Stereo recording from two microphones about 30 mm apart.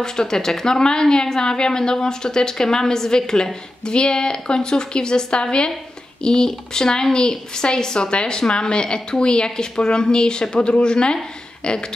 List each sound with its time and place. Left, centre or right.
0.0 s speech: centre